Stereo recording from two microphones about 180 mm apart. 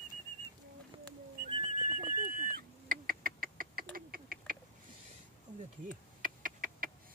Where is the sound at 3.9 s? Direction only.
55° right (ahead or behind).